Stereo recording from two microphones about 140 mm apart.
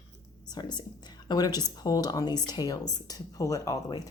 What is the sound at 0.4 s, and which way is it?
A woman's voice, 30° left (ahead or behind).